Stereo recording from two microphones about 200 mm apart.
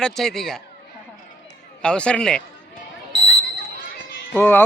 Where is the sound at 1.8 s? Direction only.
5° left (ahead or behind).